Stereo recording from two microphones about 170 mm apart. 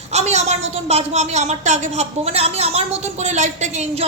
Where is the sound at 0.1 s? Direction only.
40° right (ahead or behind).